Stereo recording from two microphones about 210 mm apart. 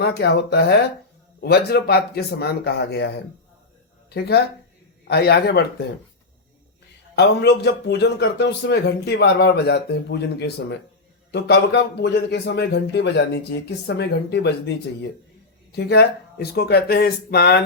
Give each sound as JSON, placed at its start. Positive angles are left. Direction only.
{"t": 0.0, "sound": "a man's voice", "side_deg": 55}
{"t": 4.1, "sound": "a man's voice", "side_deg": 50}
{"t": 7.2, "sound": "a man's voice", "side_deg": 50}
{"t": 15.7, "sound": "a man's voice", "side_deg": 50}